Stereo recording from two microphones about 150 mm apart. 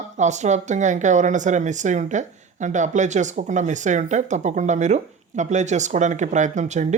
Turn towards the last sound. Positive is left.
turn(degrees=-55)  # may be behind; listen again after turning